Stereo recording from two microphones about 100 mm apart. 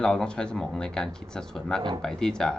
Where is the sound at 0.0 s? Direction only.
10° left (ahead or behind).